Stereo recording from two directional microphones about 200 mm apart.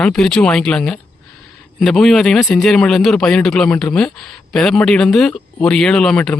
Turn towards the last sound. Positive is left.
turn(degrees=5)  # may be behind; listen again after turning